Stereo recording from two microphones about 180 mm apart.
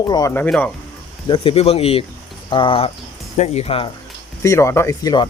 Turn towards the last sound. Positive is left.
turn(degrees=20)  # may be behind; listen again after turning